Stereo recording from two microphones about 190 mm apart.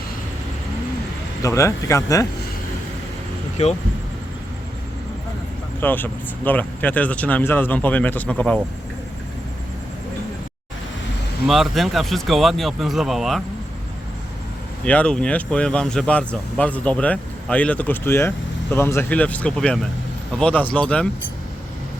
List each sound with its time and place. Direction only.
1.4 s speech: 15° left (ahead or behind)
5.8 s speech: 10° left (ahead or behind)
11.4 s speech: centre (ahead or behind)
14.8 s speech: 5° left (ahead or behind)